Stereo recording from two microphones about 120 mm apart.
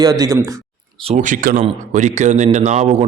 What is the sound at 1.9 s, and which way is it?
Speech, 80° right.